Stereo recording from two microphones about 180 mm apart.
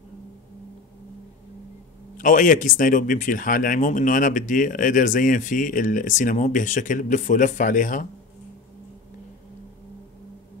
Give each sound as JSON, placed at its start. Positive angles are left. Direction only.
{"t": 2.1, "sound": "speech", "side_deg": 45}